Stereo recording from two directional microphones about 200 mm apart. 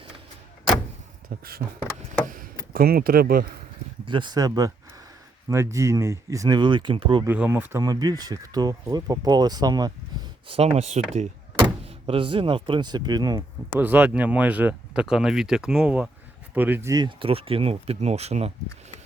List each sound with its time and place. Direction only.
1.3 s a sound: 45° right (ahead or behind)
2.2 s speech: 45° right (ahead or behind)
4.0 s speech: 25° right (ahead or behind)
5.7 s speech: 15° right (ahead or behind)
7.3 s speech: 10° right (ahead or behind)
13.7 s speech: 10° right (ahead or behind); by 18.5 s 30° right (ahead or behind)